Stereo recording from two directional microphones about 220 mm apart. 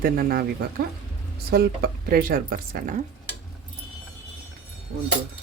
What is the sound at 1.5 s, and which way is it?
A woman's voice, 45° right (ahead or behind).